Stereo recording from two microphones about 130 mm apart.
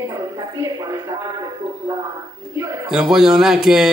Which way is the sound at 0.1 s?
30° right (ahead or behind).